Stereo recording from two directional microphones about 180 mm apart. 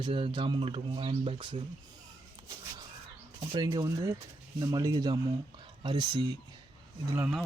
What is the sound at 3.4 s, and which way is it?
Speech, 25° right (ahead or behind).